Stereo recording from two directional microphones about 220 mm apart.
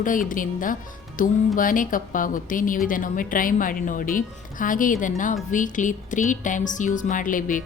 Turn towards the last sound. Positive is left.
turn(degrees=35)  # may be behind; listen again after turning